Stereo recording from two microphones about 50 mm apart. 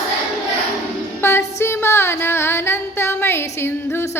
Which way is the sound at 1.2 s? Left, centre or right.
Left.